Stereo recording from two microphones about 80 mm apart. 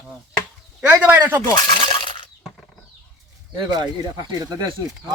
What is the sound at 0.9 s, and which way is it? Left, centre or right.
Speech, right.